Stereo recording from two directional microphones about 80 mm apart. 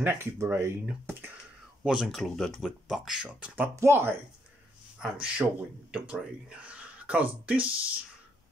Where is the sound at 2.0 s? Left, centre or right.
Centre.